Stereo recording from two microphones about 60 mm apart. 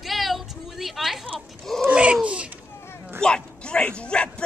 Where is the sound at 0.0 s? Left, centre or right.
Centre.